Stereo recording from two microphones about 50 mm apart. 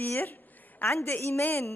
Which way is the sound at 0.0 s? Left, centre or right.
Left.